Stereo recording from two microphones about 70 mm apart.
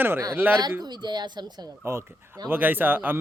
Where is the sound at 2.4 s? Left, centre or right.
Right.